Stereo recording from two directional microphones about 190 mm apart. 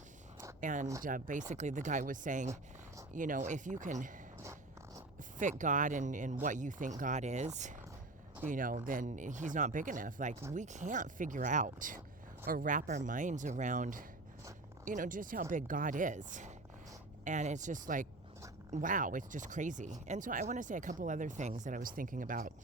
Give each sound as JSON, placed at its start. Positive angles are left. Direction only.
{"t": 0.6, "sound": "speech", "side_deg": -40}
{"t": 5.4, "sound": "speech", "side_deg": -40}